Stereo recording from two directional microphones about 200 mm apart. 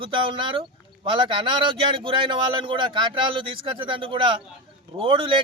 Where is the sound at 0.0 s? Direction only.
25° right (ahead or behind).